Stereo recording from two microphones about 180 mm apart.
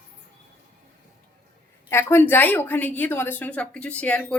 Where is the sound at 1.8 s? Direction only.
15° left (ahead or behind).